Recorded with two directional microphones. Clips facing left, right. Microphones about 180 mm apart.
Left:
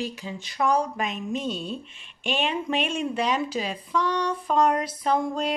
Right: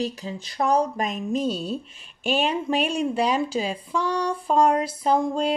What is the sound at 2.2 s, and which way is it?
Speech, 40° right (ahead or behind).